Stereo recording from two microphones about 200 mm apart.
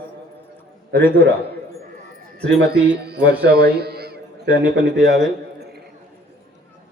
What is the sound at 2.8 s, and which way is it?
A man's voice, 55° right (ahead or behind).